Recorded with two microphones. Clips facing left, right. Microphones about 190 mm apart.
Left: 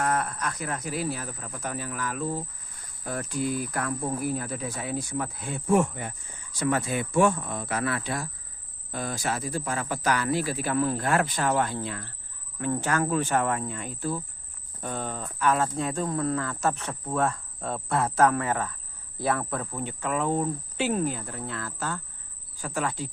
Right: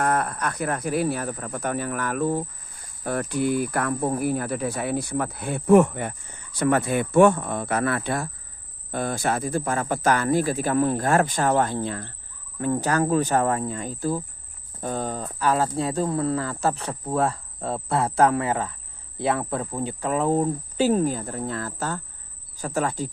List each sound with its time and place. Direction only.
0.0 s speech: 55° right (ahead or behind)